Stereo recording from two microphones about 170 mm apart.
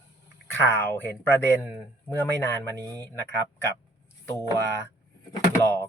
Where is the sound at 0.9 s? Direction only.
10° left (ahead or behind).